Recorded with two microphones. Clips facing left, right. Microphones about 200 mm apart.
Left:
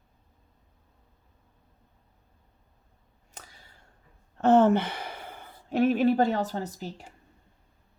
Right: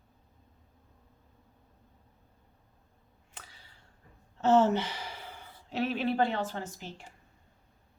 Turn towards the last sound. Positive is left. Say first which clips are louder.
# left 5 dB
turn(degrees=40)  # may be behind; listen again after turning